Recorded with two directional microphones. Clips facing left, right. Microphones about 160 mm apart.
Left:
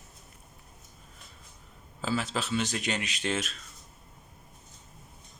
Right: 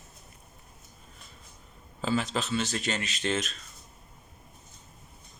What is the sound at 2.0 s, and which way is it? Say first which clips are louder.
Speech: right 2 dB; 5° left (ahead or behind).